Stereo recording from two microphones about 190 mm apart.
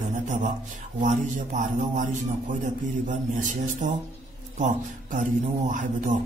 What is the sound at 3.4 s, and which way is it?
Speech, 40° right (ahead or behind).